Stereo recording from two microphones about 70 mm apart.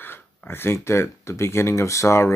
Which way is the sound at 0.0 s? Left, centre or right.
Left.